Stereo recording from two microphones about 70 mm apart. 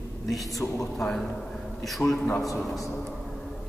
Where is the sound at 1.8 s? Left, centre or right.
Centre.